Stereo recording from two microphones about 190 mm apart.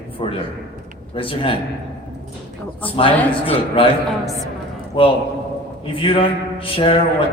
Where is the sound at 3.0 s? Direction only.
30° left (ahead or behind).